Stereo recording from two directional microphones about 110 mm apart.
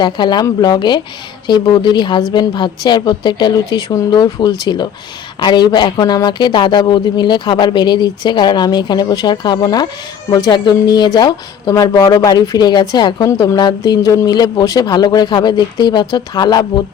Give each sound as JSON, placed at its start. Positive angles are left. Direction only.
{"t": 0.0, "sound": "a man's voice", "side_deg": 40}
{"t": 4.1, "sound": "a man's voice", "side_deg": 45}
{"t": 13.2, "sound": "speech", "side_deg": 30}
{"t": 13.6, "sound": "a man's voice", "side_deg": 40}